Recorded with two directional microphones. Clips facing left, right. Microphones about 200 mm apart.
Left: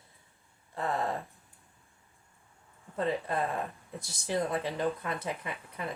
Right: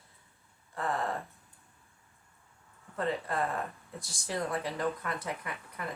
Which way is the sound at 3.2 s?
20° left (ahead or behind).